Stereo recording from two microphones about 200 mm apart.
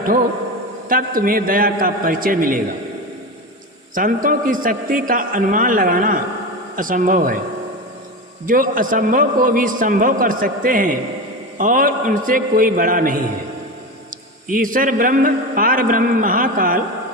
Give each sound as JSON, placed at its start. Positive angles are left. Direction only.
{"t": 0.9, "sound": "a man's voice", "side_deg": -45}
{"t": 3.9, "sound": "a man's voice", "side_deg": -40}
{"t": 8.4, "sound": "a man's voice", "side_deg": -45}
{"t": 14.4, "sound": "a man's voice", "side_deg": -45}